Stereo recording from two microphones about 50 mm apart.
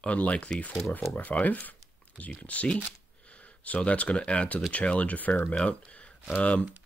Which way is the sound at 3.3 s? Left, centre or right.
Left.